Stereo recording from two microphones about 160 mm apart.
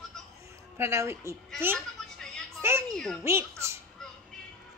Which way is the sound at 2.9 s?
5° left (ahead or behind).